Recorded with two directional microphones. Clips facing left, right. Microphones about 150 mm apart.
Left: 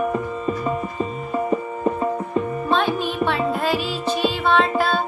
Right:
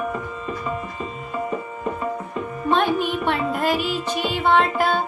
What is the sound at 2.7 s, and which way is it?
Music, 15° right (ahead or behind).